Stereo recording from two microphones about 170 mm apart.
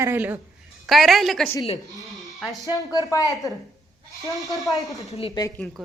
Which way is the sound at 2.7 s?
20° left (ahead or behind).